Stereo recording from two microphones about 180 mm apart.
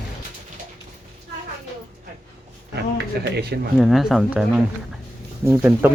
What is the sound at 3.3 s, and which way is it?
Speech, 65° right (ahead or behind).